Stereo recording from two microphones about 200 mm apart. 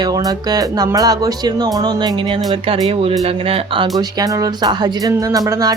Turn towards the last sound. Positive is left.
turn(degrees=-15)  # may be behind; listen again after turning